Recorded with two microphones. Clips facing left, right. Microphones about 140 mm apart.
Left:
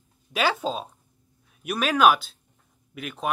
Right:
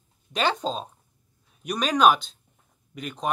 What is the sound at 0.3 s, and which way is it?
Speech, 5° left (ahead or behind).